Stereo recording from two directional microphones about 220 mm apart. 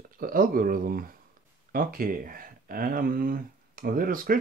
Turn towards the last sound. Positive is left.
turn(degrees=-40)  # may be behind; listen again after turning